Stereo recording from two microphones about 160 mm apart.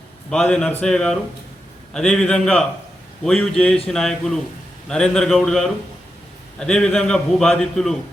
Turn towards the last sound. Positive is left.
turn(degrees=5)  # may be behind; listen again after turning